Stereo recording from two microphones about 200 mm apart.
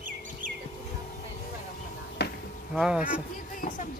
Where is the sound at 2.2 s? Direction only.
55° left (ahead or behind).